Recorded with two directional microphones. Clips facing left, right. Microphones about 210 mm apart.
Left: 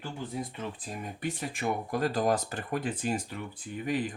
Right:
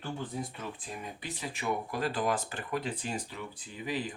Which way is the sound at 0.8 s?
45° left (ahead or behind).